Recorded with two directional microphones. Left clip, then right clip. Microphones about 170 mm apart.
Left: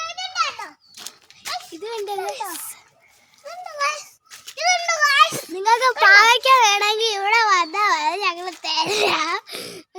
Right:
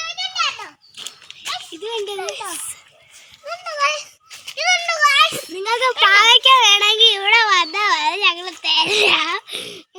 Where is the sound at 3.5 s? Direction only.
65° left (ahead or behind).